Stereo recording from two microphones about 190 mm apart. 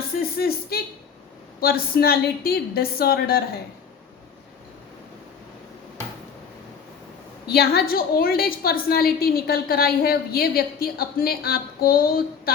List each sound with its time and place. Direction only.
0.2 s a woman's voice: 55° left (ahead or behind)
7.4 s a woman's voice: 55° left (ahead or behind)